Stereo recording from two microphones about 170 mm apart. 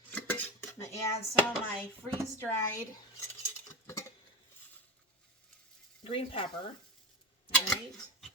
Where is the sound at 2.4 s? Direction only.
15° left (ahead or behind).